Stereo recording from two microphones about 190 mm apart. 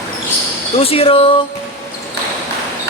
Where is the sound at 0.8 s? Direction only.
30° left (ahead or behind).